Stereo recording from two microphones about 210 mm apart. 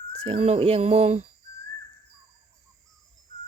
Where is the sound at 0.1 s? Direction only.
30° right (ahead or behind).